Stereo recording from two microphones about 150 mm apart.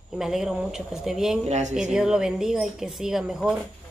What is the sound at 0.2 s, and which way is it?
A man's voice, centre (ahead or behind).